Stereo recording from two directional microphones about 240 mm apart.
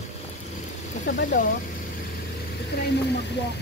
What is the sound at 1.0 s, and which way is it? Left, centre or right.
Speech, left.